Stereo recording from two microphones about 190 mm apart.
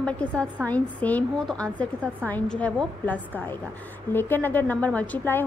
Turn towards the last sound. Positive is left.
turn(degrees=10)  # may be behind; listen again after turning